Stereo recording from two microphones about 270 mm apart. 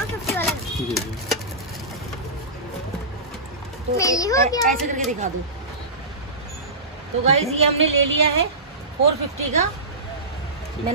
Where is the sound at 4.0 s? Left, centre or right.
Centre.